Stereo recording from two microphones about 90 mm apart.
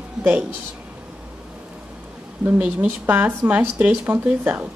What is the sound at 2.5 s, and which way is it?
Speech, 20° right (ahead or behind).